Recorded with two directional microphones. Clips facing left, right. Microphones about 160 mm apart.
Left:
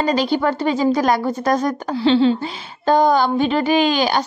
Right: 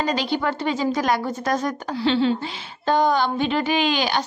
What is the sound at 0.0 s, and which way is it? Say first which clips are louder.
A woman's voice: left 5 dB; 45° left (ahead or behind).